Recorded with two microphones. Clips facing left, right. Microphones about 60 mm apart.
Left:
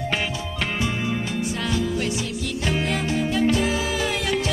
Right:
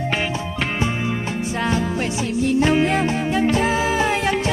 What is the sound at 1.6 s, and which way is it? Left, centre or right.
Music, right.